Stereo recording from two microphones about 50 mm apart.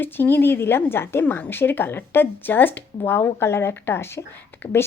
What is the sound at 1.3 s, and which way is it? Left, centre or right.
A woman's voice, left.